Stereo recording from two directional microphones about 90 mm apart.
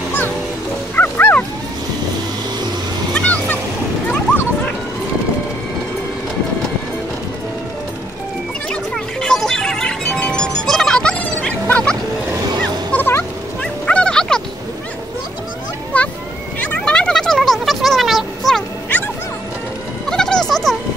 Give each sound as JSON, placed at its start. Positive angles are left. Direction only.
{"t": 0.9, "sound": "bow-wow", "side_deg": 20}
{"t": 3.2, "sound": "music", "side_deg": 15}
{"t": 8.6, "sound": "music", "side_deg": 5}
{"t": 11.6, "sound": "fowl", "side_deg": 15}
{"t": 12.9, "sound": "music", "side_deg": 25}
{"t": 13.6, "sound": "dog", "side_deg": 10}
{"t": 15.9, "sound": "a sound", "side_deg": 15}
{"t": 20.1, "sound": "a sound", "side_deg": 5}